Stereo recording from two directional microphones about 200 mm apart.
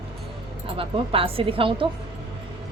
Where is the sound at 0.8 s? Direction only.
25° right (ahead or behind).